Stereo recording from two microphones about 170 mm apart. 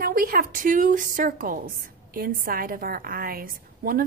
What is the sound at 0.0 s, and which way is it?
A woman's voice, 60° right (ahead or behind).